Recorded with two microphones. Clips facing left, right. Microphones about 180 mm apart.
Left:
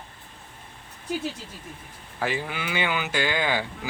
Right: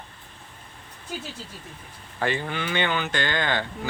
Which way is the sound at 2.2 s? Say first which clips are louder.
Right 2 dB; 5° left (ahead or behind).